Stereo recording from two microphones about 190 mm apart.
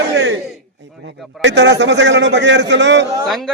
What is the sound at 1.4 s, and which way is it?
A man's voice, 65° right (ahead or behind).